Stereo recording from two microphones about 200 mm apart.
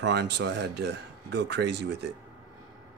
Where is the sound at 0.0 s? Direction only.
55° right (ahead or behind).